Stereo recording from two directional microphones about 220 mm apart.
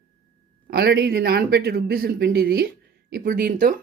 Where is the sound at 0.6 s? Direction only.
45° right (ahead or behind).